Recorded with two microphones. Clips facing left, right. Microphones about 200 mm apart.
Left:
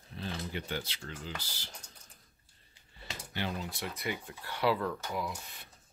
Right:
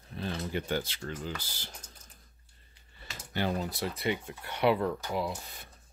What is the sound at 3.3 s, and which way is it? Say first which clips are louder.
Speech: right 6 dB; 40° right (ahead or behind).